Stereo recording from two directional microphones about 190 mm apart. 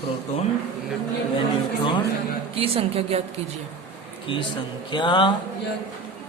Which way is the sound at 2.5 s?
30° right (ahead or behind).